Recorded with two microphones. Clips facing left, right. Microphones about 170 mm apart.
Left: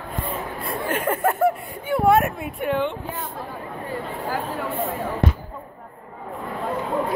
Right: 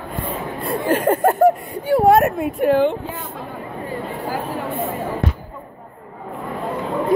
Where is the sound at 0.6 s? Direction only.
35° right (ahead or behind).